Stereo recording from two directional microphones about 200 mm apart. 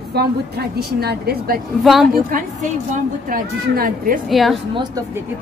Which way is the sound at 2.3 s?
40° right (ahead or behind).